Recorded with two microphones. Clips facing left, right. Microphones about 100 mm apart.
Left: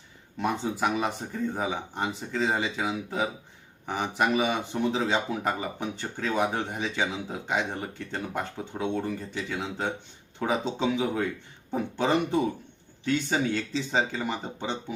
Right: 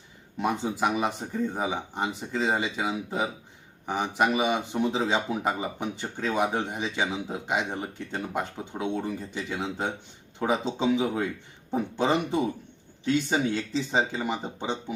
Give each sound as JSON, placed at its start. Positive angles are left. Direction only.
{"t": 0.3, "sound": "speech", "side_deg": -5}
{"t": 10.9, "sound": "speech", "side_deg": -5}